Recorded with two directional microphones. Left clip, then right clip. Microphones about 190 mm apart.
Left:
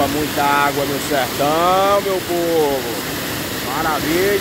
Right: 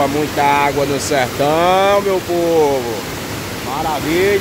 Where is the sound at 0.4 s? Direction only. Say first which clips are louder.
Right 2 dB; 30° right (ahead or behind).